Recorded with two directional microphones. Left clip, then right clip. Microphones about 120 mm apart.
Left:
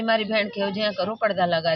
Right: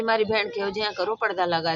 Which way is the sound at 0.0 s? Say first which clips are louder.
Even; 40° right (ahead or behind).